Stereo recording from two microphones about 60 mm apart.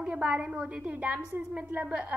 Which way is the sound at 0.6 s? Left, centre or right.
Right.